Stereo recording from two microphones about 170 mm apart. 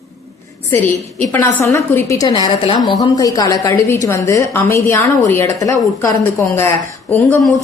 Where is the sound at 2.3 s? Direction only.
30° left (ahead or behind).